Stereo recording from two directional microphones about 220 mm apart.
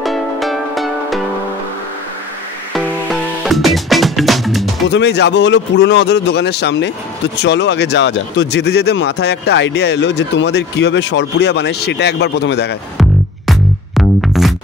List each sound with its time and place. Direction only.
0.0 s music: centre (ahead or behind)
2.7 s music: centre (ahead or behind)
4.9 s speech: 50° left (ahead or behind)
13.5 s music: centre (ahead or behind)